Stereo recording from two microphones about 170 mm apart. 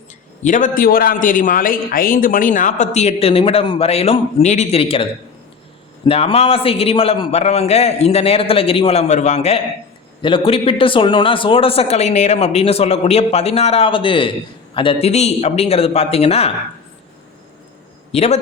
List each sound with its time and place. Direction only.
0.4 s a man's voice: 50° left (ahead or behind); by 5.0 s 35° left (ahead or behind)
6.1 s a man's voice: 35° left (ahead or behind)
10.2 s a man's voice: 30° left (ahead or behind)
18.1 s a man's voice: 40° left (ahead or behind)